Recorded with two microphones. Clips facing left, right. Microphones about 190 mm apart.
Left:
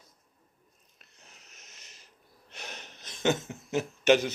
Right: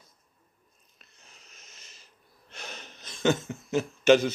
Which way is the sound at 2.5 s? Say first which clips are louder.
Right 1 dB; 15° left (ahead or behind).